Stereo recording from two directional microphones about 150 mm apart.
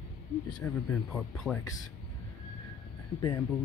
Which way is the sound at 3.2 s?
20° left (ahead or behind).